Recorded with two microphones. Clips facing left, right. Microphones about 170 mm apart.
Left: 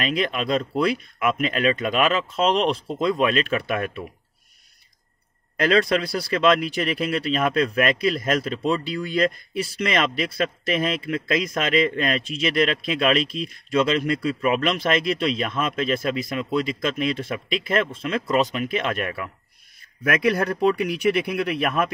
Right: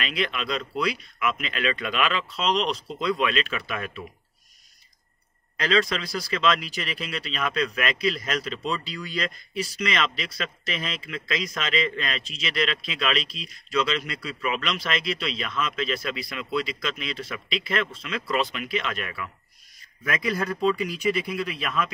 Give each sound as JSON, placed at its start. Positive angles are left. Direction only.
{"t": 0.0, "sound": "speech", "side_deg": 45}
{"t": 5.6, "sound": "speech", "side_deg": 55}
{"t": 20.0, "sound": "speech", "side_deg": 65}